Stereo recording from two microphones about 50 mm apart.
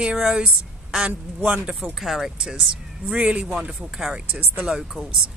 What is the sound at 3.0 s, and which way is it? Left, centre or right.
Speech, right.